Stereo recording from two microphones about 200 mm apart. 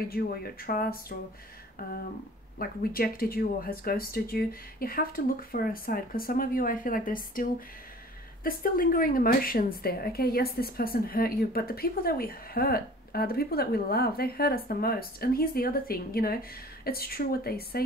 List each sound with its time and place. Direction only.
0.1 s a woman's voice: 50° left (ahead or behind)
2.6 s a woman's voice: 45° left (ahead or behind)
8.5 s a woman's voice: 45° left (ahead or behind)